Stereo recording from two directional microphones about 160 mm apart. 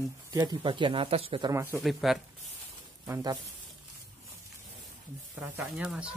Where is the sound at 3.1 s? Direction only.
25° right (ahead or behind).